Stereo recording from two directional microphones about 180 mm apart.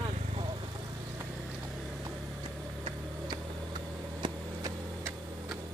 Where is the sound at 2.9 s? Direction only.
25° right (ahead or behind).